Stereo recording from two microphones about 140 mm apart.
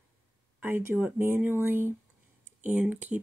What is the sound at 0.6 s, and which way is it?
Speech, 15° right (ahead or behind).